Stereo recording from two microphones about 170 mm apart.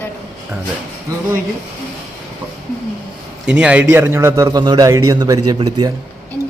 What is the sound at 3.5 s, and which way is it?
A man's voice, 5° right (ahead or behind).